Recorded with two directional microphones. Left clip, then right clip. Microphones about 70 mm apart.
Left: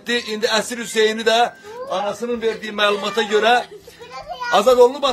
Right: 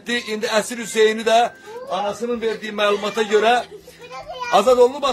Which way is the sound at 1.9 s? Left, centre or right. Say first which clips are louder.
Even; centre.